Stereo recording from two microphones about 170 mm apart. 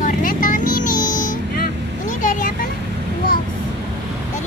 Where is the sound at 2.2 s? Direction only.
50° left (ahead or behind).